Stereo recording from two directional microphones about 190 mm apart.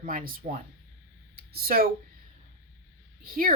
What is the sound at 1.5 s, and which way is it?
Speech, 50° right (ahead or behind).